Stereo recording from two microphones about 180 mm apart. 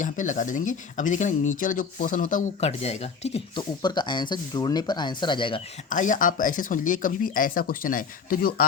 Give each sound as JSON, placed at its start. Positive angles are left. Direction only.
{"t": 0.0, "sound": "speech", "side_deg": 45}
{"t": 3.8, "sound": "speech", "side_deg": 25}
{"t": 5.9, "sound": "speech", "side_deg": 45}